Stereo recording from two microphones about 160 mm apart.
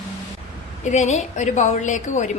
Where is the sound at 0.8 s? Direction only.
45° left (ahead or behind).